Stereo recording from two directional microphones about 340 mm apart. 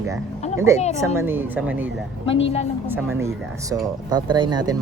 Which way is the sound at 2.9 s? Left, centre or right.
Centre.